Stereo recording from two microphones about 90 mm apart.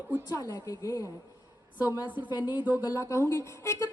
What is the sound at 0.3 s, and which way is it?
Speech, 45° left (ahead or behind).